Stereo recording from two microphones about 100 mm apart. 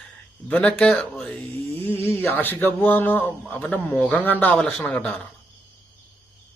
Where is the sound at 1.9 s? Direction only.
20° left (ahead or behind).